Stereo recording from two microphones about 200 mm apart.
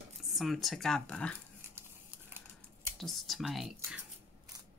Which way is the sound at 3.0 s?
Centre (ahead or behind).